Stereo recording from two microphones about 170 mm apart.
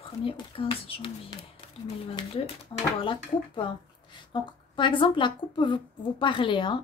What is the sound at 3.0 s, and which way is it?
A woman's voice, 30° left (ahead or behind).